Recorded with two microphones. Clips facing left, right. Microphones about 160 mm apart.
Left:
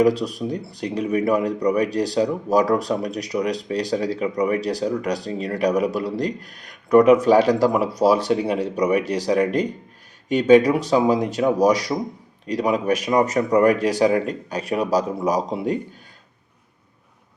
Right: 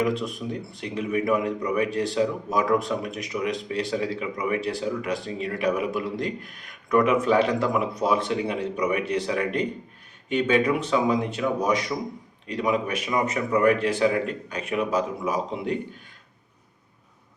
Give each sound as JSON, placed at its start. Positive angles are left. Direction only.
{"t": 0.0, "sound": "speech", "side_deg": 35}